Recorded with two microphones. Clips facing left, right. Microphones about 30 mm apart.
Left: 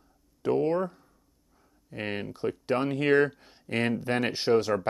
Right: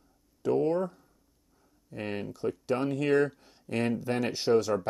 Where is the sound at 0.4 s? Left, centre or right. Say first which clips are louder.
Left 1 dB; left.